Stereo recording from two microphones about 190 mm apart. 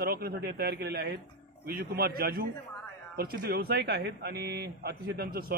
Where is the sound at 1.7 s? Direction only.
55° right (ahead or behind).